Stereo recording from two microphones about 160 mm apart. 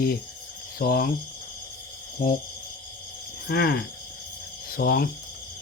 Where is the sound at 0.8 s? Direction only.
70° left (ahead or behind).